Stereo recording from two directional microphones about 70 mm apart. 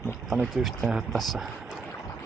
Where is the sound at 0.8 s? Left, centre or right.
Centre.